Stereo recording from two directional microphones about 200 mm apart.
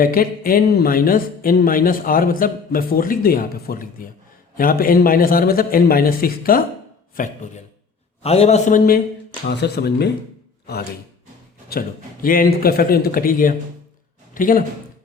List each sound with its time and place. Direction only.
0.0 s speech: 45° left (ahead or behind)
8.2 s a man's voice: 30° left (ahead or behind)
9.5 s speech: 55° left (ahead or behind)
11.7 s speech: 45° left (ahead or behind)